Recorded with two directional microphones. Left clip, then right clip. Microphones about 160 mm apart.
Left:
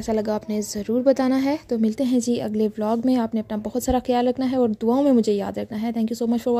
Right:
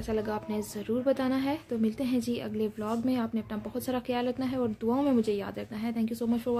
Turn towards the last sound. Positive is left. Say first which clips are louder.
# left 8 dB
turn(degrees=50)  # may be behind; listen again after turning